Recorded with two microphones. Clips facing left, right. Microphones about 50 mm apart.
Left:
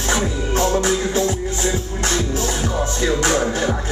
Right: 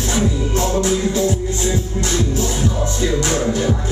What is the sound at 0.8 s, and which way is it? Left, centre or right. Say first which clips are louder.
Music: right 1 dB; left.